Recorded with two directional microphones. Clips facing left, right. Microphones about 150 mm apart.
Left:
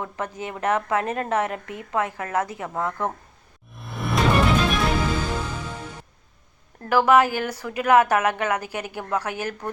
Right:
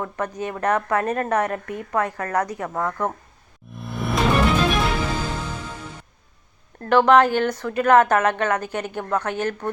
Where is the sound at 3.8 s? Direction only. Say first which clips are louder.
Right 1 dB; centre (ahead or behind).